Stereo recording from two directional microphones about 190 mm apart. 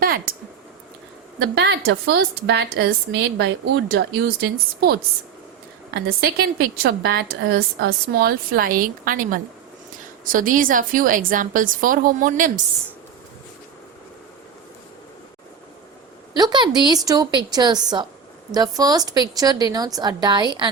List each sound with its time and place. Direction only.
0.0 s a sound: 50° right (ahead or behind)
1.4 s a woman's voice: 65° right (ahead or behind); by 12.6 s 45° right (ahead or behind)
16.4 s a woman's voice: 20° right (ahead or behind)